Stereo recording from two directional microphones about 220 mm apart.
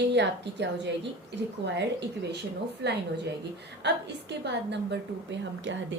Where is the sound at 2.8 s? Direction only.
50° right (ahead or behind).